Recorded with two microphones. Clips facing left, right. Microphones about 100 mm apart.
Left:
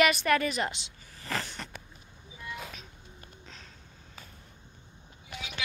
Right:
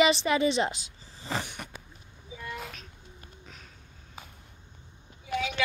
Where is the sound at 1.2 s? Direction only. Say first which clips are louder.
Right 1 dB; 20° right (ahead or behind).